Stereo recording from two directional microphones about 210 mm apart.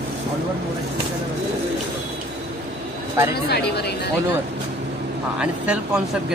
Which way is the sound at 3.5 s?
50° left (ahead or behind).